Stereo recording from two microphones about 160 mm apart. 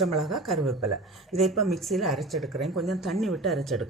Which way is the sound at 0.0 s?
Centre (ahead or behind).